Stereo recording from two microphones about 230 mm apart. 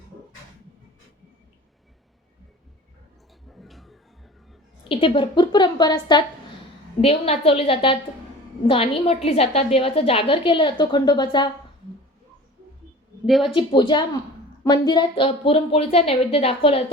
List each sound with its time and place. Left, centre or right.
3.5 s a sound: centre
4.9 s a woman's voice: left
13.2 s speech: centre
13.5 s a woman's voice: left